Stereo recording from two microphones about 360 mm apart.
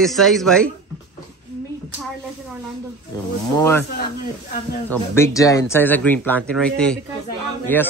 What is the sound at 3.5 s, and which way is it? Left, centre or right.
Speech, centre.